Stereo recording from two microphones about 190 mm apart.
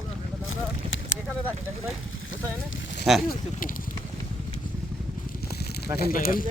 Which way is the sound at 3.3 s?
45° left (ahead or behind).